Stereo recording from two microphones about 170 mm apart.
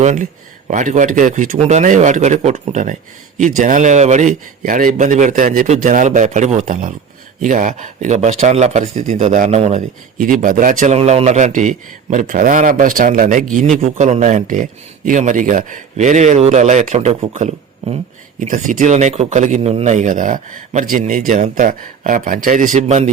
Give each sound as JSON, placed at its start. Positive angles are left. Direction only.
{"t": 0.0, "sound": "a man's voice", "side_deg": -45}
{"t": 10.2, "sound": "a man's voice", "side_deg": -50}